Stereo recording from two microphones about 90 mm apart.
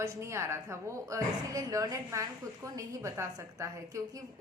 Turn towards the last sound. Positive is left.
turn(degrees=-40)  # may be behind; listen again after turning